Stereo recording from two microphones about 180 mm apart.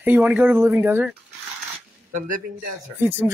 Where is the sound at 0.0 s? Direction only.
10° right (ahead or behind).